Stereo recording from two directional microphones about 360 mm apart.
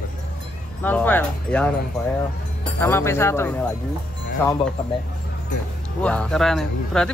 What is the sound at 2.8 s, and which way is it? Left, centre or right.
Speech, centre.